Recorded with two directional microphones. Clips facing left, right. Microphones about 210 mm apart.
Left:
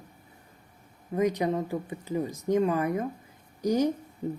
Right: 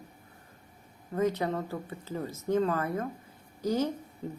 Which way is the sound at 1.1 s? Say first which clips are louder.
Left 3 dB; 15° left (ahead or behind).